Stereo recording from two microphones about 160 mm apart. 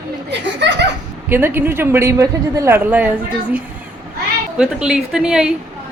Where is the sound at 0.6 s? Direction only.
90° right.